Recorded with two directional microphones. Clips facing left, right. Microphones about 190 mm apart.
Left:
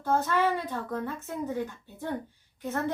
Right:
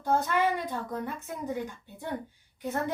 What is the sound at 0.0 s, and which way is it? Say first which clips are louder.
A woman's voice: even; 15° right (ahead or behind).